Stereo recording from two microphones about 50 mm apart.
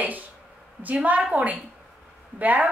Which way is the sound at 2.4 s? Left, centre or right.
Right.